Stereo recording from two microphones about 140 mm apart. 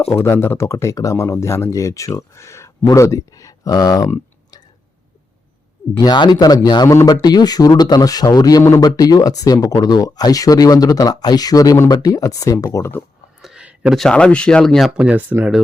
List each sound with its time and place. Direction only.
0.1 s speech: 20° left (ahead or behind)
6.0 s speech: 30° left (ahead or behind)
13.4 s speech: 5° right (ahead or behind)